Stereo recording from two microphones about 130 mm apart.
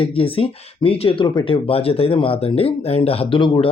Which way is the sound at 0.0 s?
45° left (ahead or behind).